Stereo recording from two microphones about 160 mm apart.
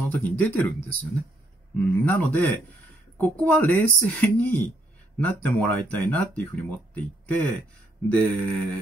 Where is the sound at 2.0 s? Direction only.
10° left (ahead or behind).